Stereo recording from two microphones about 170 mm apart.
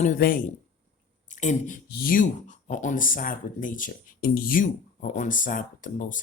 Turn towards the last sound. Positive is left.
turn(degrees=50)  # may be behind; listen again after turning